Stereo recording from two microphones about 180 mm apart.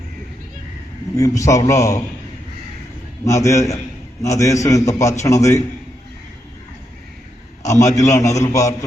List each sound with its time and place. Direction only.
1.1 s a man's voice: 20° left (ahead or behind)
3.2 s a man's voice: 15° left (ahead or behind)
7.6 s a man's voice: 20° left (ahead or behind)